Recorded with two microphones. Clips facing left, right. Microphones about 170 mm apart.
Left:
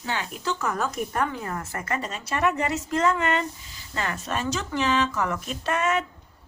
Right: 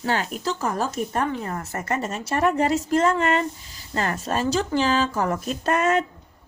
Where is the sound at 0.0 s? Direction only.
40° right (ahead or behind).